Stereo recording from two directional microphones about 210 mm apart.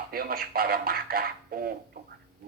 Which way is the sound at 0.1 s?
45° right (ahead or behind).